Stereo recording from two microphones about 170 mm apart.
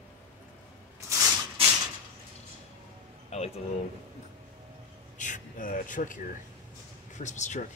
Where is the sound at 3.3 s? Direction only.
40° left (ahead or behind).